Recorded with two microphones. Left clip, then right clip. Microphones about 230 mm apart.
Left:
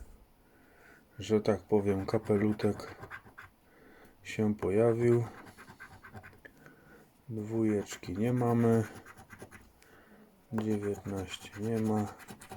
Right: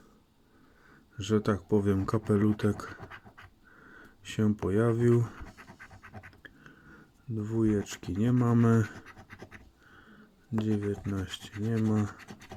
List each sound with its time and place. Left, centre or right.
1.2 s speech: right
7.4 s speech: right
10.6 s speech: right